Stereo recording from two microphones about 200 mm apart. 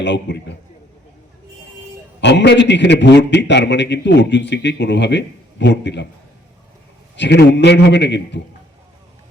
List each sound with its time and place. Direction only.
0.0 s a man's voice: 60° left (ahead or behind)
2.2 s a man's voice: 60° left (ahead or behind)
7.2 s a man's voice: 55° left (ahead or behind)